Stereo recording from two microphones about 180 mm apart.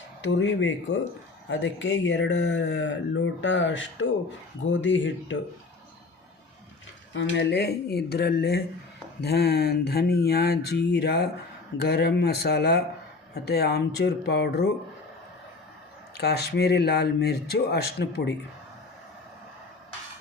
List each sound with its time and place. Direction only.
0.3 s speech: 90° left
7.1 s speech: 85° left; by 14.7 s 65° left (ahead or behind)
16.1 s speech: 65° left (ahead or behind)